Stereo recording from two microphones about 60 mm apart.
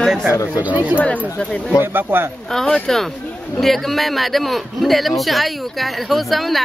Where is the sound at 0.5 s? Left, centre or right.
Right.